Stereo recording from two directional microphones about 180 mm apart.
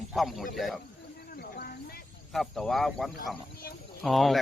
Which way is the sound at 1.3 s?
55° left (ahead or behind).